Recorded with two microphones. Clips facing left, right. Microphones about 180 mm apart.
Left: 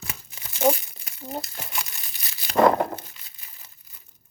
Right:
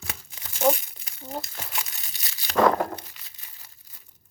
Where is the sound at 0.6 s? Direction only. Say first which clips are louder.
Left 1 dB; centre (ahead or behind).